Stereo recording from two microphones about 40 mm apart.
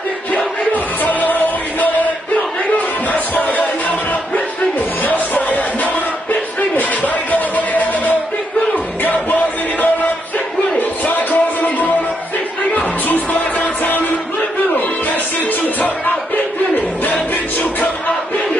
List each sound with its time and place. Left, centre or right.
1.0 s music: left
3.1 s music: left
5.0 s music: left
7.2 s music: left